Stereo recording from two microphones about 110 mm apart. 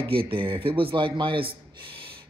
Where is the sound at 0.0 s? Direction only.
55° right (ahead or behind).